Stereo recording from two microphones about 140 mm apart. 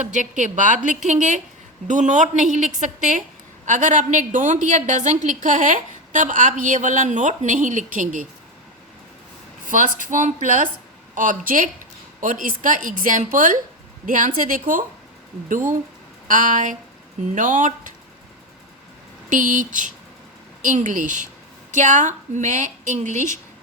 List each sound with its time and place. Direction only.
0.0 s a woman's voice: 65° right (ahead or behind)
9.6 s a woman's voice: 70° right (ahead or behind)
16.2 s a woman's voice: 65° right (ahead or behind)
19.3 s a woman's voice: 70° right (ahead or behind)